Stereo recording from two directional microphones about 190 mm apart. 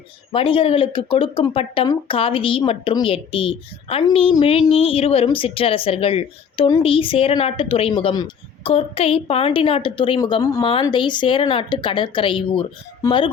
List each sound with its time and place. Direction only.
0.3 s speech: 30° left (ahead or behind)